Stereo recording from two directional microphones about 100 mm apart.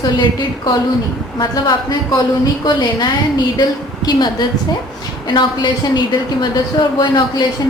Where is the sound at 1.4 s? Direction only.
40° left (ahead or behind).